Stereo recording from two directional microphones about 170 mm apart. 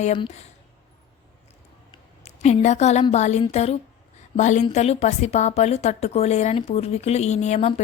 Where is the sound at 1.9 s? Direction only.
40° left (ahead or behind).